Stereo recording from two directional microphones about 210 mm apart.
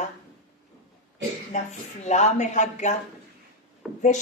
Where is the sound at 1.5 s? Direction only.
35° left (ahead or behind).